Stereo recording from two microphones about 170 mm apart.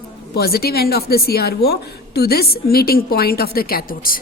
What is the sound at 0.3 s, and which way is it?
A woman's voice, 65° left (ahead or behind).